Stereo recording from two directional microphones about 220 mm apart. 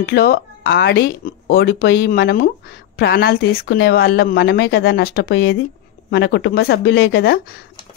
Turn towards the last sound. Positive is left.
turn(degrees=45)  # may be behind; listen again after turning